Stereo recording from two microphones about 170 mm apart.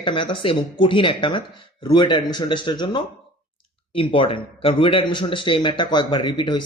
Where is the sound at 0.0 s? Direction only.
30° left (ahead or behind).